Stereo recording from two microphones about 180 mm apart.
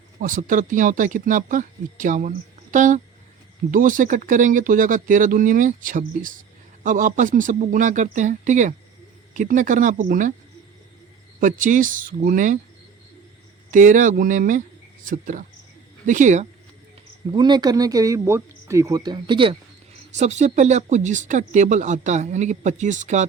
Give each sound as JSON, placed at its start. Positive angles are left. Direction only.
{"t": 0.2, "sound": "speech", "side_deg": -50}
{"t": 11.3, "sound": "speech", "side_deg": -45}
{"t": 13.7, "sound": "speech", "side_deg": -45}
{"t": 17.2, "sound": "speech", "side_deg": -25}
{"t": 20.1, "sound": "speech", "side_deg": -40}